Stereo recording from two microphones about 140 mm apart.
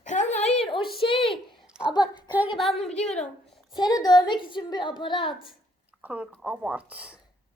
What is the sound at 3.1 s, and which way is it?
Speech, 5° left (ahead or behind).